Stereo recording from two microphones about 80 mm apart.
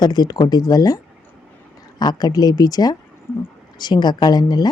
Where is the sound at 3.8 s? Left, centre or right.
Left.